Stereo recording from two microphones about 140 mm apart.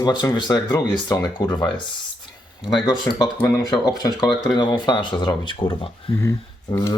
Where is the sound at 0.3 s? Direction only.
30° left (ahead or behind).